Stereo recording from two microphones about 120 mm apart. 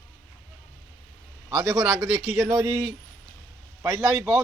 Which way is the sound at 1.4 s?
25° right (ahead or behind).